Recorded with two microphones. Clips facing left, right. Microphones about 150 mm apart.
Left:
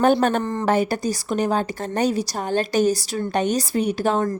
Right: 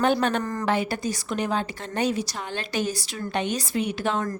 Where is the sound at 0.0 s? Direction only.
45° left (ahead or behind).